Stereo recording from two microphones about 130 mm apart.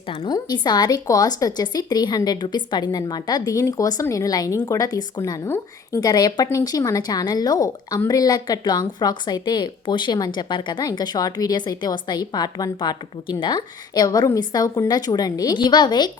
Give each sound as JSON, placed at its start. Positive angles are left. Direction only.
{"t": 0.3, "sound": "a woman's voice", "side_deg": 30}